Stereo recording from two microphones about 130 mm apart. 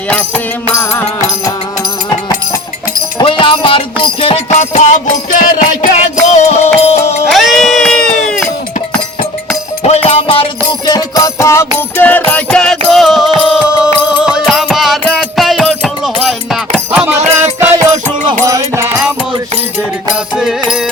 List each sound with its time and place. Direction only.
0.1 s music: 10° left (ahead or behind)
3.2 s music: 40° left (ahead or behind)
7.3 s a sound: centre (ahead or behind)
9.8 s music: 50° left (ahead or behind); by 17.0 s 5° right (ahead or behind)
18.3 s music: 25° right (ahead or behind)
20.3 s music: 5° right (ahead or behind)